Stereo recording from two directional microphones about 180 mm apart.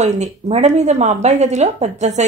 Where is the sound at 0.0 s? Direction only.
40° right (ahead or behind).